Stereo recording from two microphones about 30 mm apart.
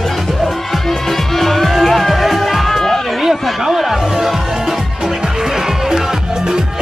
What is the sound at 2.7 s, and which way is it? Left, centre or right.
Music, centre.